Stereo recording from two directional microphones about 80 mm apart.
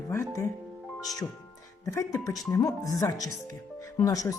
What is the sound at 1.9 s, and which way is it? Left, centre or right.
Music, left.